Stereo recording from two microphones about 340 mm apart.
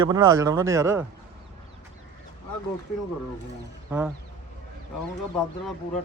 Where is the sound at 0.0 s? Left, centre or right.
Centre.